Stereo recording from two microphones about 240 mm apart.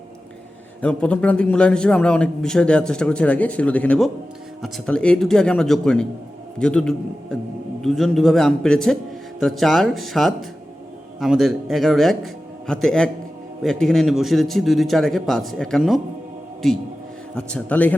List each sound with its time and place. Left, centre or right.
0.8 s a man's voice: centre